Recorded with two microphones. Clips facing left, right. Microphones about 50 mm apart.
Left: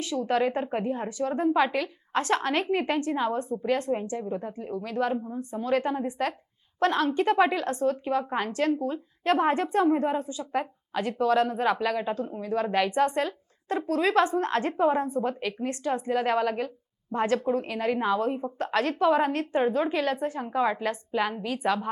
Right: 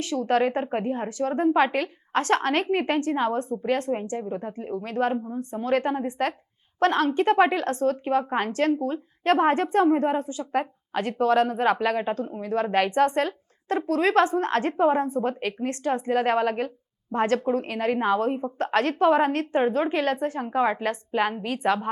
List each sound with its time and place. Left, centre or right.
0.0 s a woman's voice: right
4.2 s speech: right
4.5 s a woman's voice: right
5.1 s speech: centre
5.4 s a woman's voice: right